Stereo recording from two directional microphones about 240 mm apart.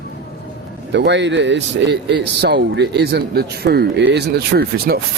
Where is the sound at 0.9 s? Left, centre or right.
Right.